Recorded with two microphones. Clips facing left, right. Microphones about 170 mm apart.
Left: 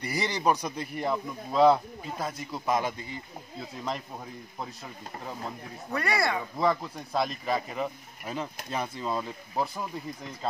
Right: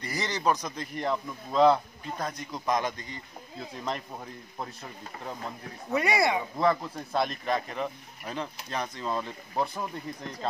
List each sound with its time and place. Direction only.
0.0 s a man's voice: 10° left (ahead or behind)
5.9 s speech: 20° right (ahead or behind)
6.6 s speech: centre (ahead or behind)